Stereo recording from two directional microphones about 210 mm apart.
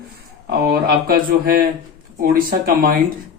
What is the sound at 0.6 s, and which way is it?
Speech, 45° right (ahead or behind).